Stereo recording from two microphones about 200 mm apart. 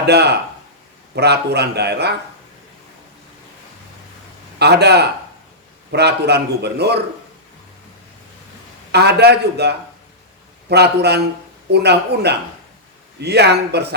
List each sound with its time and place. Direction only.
0.0 s a man's voice: 55° right (ahead or behind)
4.6 s a man's voice: 55° right (ahead or behind)
8.9 s a man's voice: 55° right (ahead or behind)